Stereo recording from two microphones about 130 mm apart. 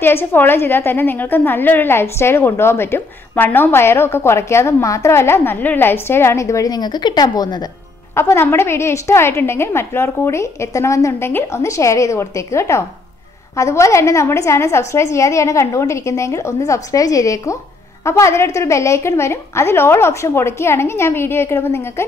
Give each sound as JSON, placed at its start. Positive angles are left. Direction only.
{"t": 0.0, "sound": "a woman's voice", "side_deg": 15}
{"t": 8.1, "sound": "a woman's voice", "side_deg": 20}